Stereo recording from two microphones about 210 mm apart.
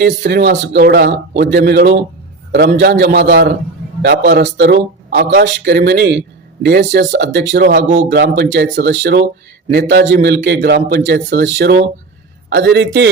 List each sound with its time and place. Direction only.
0.0 s speech: 50° right (ahead or behind)